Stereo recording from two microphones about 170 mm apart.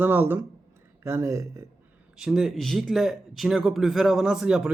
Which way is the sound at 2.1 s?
Centre (ahead or behind).